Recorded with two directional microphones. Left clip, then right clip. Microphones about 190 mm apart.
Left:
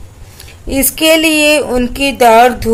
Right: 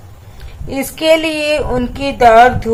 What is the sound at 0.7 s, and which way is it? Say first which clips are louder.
A woman's voice: left 2 dB; 25° left (ahead or behind).